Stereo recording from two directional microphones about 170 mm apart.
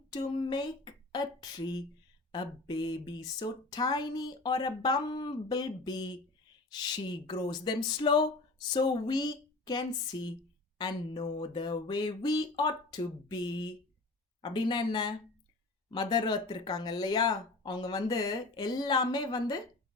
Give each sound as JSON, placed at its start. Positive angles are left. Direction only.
{"t": 0.2, "sound": "speech", "side_deg": 30}
{"t": 7.3, "sound": "speech", "side_deg": 25}